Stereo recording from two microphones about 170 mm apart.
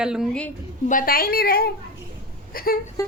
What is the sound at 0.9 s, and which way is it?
Speech, 55° left (ahead or behind).